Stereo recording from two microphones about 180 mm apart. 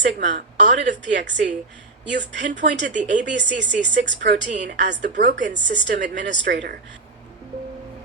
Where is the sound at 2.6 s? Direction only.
80° right.